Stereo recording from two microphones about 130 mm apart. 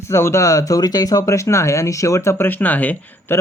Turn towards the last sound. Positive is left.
turn(degrees=15)  # may be behind; listen again after turning